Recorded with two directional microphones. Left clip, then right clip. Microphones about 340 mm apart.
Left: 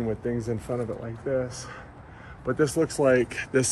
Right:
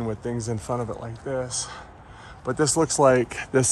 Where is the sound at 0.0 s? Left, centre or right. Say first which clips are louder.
Left 1 dB; centre.